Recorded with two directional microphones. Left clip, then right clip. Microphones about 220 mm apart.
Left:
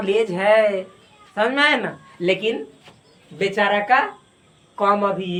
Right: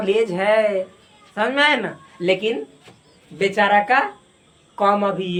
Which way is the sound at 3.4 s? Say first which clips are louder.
Right 3 dB; 20° right (ahead or behind).